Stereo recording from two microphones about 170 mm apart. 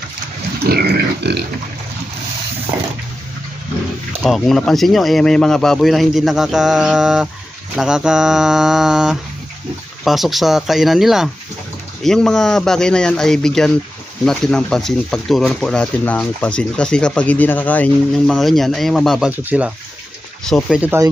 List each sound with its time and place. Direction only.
0.6 s pig: 70° right (ahead or behind)
4.2 s speech: 5° left (ahead or behind)
20.4 s speech: centre (ahead or behind)